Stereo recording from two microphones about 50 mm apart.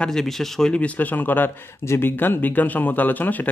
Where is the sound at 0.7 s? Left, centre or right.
Left.